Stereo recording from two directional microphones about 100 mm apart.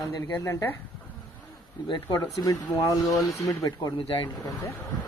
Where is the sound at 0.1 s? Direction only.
35° left (ahead or behind).